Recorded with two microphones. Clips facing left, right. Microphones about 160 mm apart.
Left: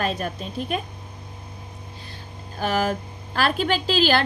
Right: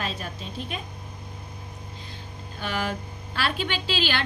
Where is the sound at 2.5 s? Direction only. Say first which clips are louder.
Left 6 dB; 40° left (ahead or behind).